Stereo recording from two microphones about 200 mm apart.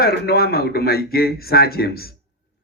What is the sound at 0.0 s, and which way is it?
A man's voice, 50° left (ahead or behind).